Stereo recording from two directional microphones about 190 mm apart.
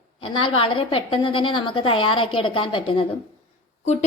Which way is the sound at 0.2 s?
25° left (ahead or behind).